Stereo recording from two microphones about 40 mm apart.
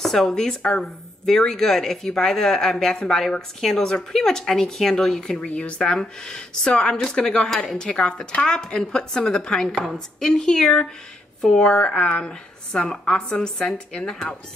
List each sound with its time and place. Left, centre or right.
0.0 s a sound: centre
0.3 s speech: centre
5.5 s a woman's voice: left
5.8 s a woman's voice: centre
7.4 s a woman's voice: centre